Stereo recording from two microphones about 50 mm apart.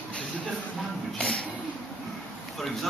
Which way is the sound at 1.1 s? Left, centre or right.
Centre.